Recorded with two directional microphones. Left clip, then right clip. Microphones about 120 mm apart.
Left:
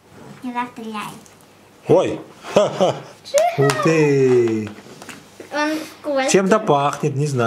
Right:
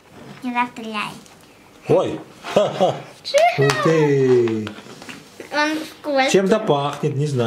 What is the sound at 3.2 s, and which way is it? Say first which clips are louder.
Speech: even; 5° right (ahead or behind).